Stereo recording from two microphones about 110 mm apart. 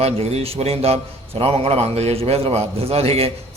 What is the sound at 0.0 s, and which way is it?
A man's voice, 70° right (ahead or behind).